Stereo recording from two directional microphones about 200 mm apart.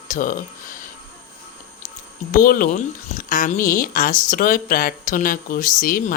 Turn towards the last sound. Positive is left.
turn(degrees=45)  # may be behind; listen again after turning